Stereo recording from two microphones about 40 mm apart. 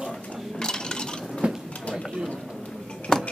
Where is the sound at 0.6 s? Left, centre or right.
Centre.